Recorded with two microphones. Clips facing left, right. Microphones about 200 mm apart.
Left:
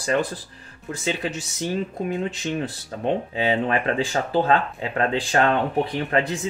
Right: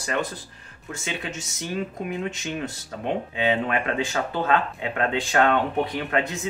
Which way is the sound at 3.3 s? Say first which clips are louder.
Left 2 dB; 35° left (ahead or behind).